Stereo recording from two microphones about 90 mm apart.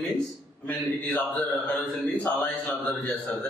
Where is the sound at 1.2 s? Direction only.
20° left (ahead or behind).